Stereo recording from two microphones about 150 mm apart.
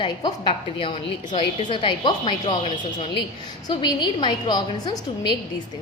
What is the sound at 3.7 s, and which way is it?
A woman's voice, 30° left (ahead or behind).